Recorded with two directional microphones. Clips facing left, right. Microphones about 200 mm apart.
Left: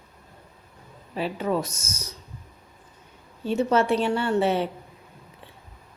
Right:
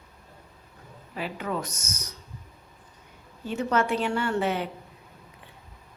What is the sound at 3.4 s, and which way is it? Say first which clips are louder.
A woman's voice: left 4 dB; 25° left (ahead or behind).